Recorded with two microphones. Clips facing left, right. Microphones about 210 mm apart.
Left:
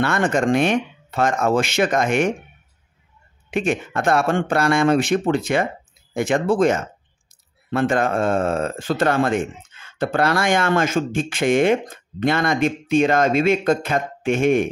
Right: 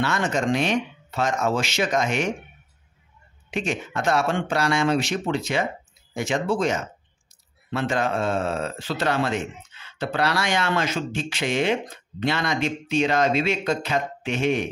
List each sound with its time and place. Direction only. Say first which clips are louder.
0.0 s speech: left 5 dB; 55° left (ahead or behind)
3.4 s speech: left 6 dB; 55° left (ahead or behind)